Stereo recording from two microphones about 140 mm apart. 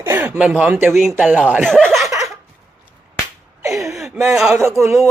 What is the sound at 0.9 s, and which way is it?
Speech, centre (ahead or behind).